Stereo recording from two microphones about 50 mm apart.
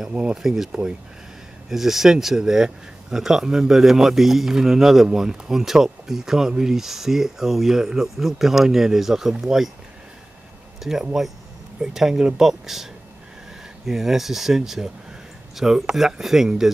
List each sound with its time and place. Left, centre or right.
0.1 s speech: right
0.4 s speech: centre
0.7 s speech: centre
1.7 s speech: centre
10.8 s speech: centre
13.8 s speech: centre